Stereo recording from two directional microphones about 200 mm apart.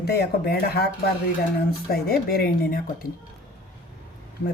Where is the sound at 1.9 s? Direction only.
50° left (ahead or behind).